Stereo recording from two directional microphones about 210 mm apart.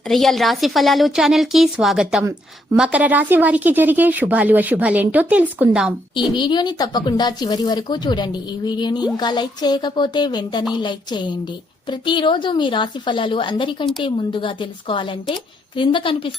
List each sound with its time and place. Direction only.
0.1 s a woman's voice: centre (ahead or behind)
6.3 s speech: 20° left (ahead or behind)